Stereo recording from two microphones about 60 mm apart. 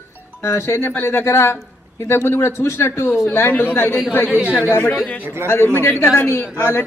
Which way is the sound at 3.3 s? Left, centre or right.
Left.